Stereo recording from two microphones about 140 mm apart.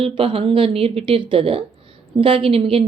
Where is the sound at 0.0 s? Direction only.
40° right (ahead or behind).